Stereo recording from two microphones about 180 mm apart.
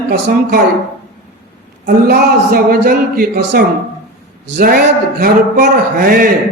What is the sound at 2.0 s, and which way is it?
Speech, 60° right (ahead or behind).